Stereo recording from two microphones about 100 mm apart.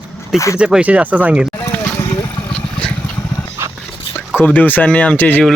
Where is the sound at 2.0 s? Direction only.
30° left (ahead or behind).